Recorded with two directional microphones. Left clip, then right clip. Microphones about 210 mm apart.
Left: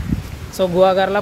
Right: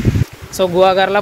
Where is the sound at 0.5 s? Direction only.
Centre (ahead or behind).